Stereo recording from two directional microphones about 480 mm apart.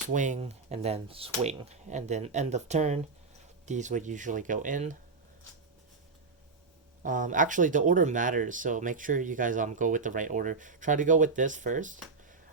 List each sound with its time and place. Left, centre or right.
0.1 s speech: centre
7.0 s speech: centre